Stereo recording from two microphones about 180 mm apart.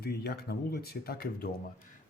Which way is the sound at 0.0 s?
60° left (ahead or behind).